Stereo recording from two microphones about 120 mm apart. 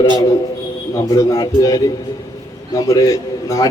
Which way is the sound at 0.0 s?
40° left (ahead or behind).